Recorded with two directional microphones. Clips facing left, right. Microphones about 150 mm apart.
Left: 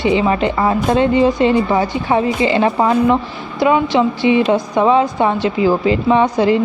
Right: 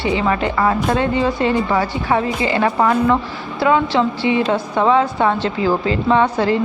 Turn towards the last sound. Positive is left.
turn(degrees=15)  # may be behind; listen again after turning